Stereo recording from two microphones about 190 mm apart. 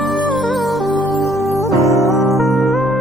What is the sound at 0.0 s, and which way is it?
Music, centre (ahead or behind).